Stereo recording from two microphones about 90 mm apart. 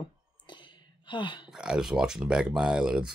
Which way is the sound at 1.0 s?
60° left (ahead or behind).